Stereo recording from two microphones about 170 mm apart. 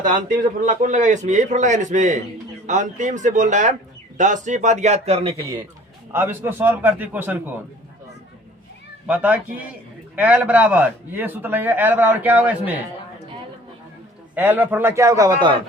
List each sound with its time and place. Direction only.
0.0 s a man's voice: 50° right (ahead or behind)
6.1 s a man's voice: 15° right (ahead or behind)
9.0 s a man's voice: 10° right (ahead or behind)
14.3 s a man's voice: 10° right (ahead or behind)